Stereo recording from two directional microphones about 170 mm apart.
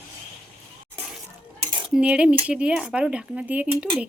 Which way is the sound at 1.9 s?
5° right (ahead or behind).